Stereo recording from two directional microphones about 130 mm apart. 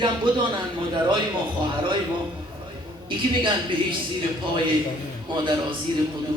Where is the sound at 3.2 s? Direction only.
40° right (ahead or behind).